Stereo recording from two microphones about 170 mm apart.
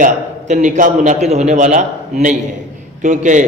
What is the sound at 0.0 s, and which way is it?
A man's voice, 45° right (ahead or behind).